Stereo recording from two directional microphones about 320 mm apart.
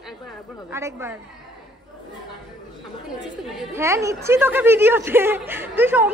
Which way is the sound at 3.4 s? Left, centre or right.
Centre.